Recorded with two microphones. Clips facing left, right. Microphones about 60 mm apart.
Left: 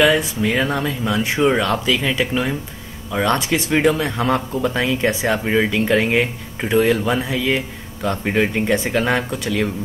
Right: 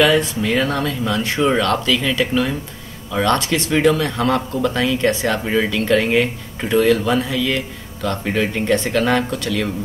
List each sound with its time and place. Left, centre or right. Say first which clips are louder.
0.0 s speech: even; centre